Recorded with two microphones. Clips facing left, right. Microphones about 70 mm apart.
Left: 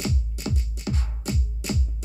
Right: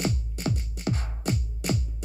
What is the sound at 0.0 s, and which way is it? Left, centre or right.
Music, right.